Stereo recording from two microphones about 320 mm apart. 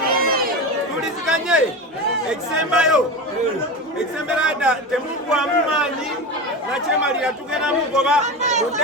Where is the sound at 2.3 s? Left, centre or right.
Centre.